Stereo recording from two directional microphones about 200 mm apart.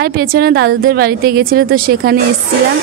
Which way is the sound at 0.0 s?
50° right (ahead or behind).